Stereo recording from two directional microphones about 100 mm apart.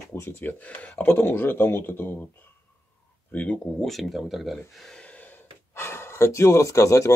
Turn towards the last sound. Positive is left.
turn(degrees=30)  # may be behind; listen again after turning